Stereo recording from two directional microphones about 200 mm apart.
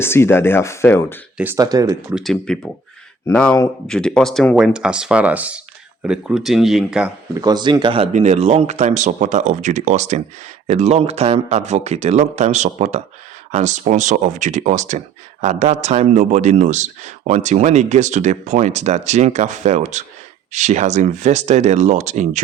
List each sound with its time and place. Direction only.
0.0 s speech: 10° left (ahead or behind)
1.5 s speech: 20° right (ahead or behind)
2.1 s speech: centre (ahead or behind)
7.4 s speech: 20° right (ahead or behind)